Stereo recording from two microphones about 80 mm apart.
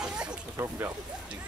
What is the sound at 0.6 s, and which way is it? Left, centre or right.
Speech, right.